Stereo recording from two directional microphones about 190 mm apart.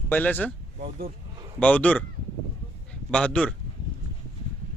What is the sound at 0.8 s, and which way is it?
Speech, 50° right (ahead or behind).